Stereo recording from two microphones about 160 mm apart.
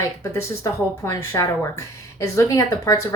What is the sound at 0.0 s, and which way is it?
A woman's voice, 20° left (ahead or behind).